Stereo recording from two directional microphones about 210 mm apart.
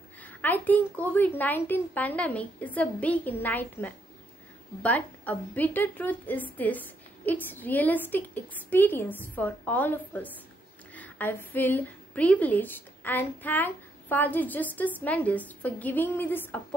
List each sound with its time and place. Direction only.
0.2 s a woman's voice: 10° left (ahead or behind)